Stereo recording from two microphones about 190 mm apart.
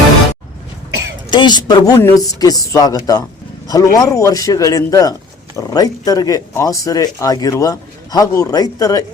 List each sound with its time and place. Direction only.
1.3 s a man's voice: 25° left (ahead or behind)